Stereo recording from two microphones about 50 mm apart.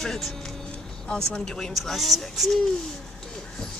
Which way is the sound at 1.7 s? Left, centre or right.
Centre.